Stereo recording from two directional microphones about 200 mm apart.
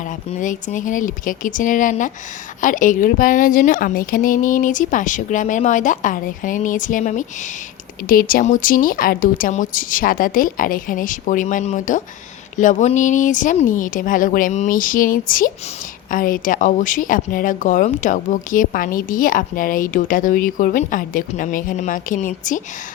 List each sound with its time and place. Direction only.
0.3 s a woman's voice: 40° left (ahead or behind)